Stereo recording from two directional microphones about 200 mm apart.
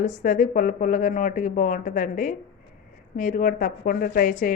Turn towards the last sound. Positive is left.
turn(degrees=45)  # may be behind; listen again after turning